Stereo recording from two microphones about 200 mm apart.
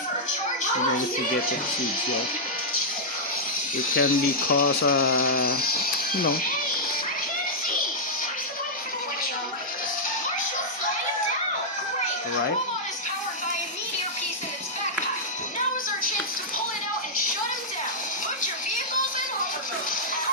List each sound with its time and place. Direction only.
3.9 s speech: 45° left (ahead or behind)